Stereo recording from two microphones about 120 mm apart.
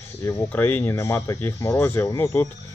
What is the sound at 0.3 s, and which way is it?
A man's voice, 15° left (ahead or behind).